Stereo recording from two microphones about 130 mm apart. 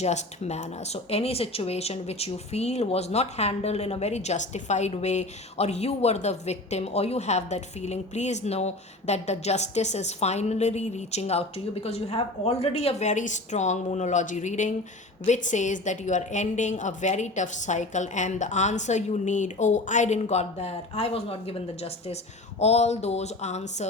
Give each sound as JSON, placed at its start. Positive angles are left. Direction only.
{"t": 0.0, "sound": "speech", "side_deg": 60}